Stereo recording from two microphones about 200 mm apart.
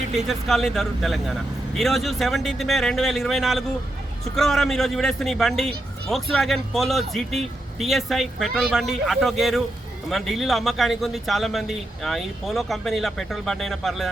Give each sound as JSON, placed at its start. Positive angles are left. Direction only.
{"t": 0.3, "sound": "speech", "side_deg": 0}